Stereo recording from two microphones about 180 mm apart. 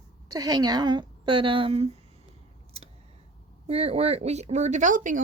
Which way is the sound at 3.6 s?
35° right (ahead or behind).